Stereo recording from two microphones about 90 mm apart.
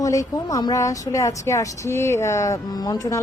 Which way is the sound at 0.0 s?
40° left (ahead or behind).